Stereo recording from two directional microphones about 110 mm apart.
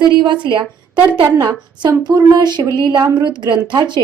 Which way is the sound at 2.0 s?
40° right (ahead or behind).